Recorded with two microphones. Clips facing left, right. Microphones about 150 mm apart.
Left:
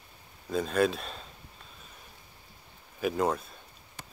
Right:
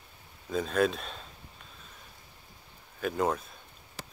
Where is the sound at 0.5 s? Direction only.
Centre (ahead or behind).